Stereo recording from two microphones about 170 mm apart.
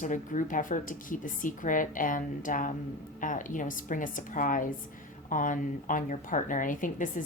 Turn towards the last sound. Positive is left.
turn(degrees=50)  # may be behind; listen again after turning